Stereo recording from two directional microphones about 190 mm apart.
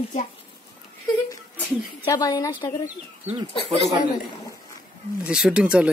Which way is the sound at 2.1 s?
20° left (ahead or behind).